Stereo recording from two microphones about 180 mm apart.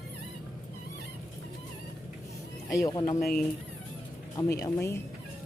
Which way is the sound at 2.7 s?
20° left (ahead or behind).